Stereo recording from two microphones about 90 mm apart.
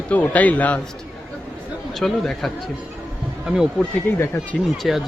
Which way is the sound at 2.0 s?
5° left (ahead or behind).